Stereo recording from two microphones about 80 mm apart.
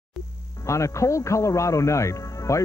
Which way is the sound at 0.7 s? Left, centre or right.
Left.